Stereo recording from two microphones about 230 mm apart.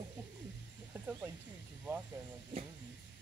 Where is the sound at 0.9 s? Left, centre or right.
Centre.